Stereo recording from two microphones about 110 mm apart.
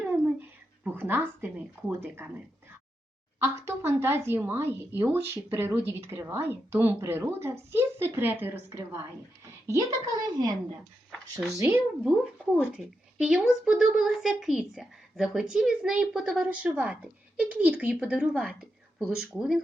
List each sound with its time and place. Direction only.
0.0 s a sound: 15° right (ahead or behind)
0.9 s a woman's voice: 20° right (ahead or behind)
3.4 s a woman's voice: 25° right (ahead or behind)
9.6 s speech: 30° right (ahead or behind)
11.1 s speech: 5° right (ahead or behind)
11.5 s a woman's voice: 25° right (ahead or behind)
12.7 s speech: 5° right (ahead or behind)